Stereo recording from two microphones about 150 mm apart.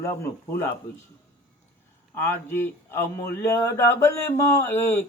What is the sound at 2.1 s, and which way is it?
A man's voice, 15° left (ahead or behind).